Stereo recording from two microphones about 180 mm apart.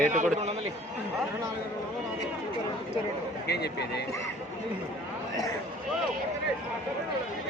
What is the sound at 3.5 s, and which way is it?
Speech, 65° left (ahead or behind).